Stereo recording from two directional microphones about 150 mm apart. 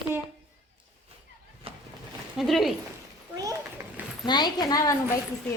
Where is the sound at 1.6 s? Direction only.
40° right (ahead or behind).